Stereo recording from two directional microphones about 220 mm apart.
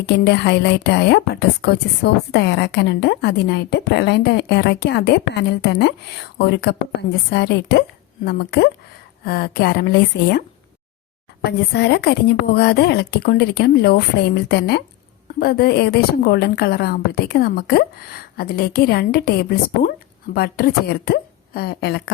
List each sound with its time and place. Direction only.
0.0 s a woman's voice: 50° left (ahead or behind)
11.4 s a woman's voice: 50° left (ahead or behind)